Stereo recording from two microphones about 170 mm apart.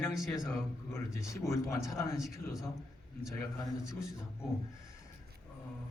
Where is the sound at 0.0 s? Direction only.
Centre (ahead or behind).